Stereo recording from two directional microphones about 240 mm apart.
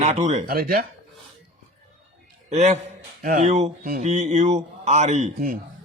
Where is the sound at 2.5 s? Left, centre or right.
Right.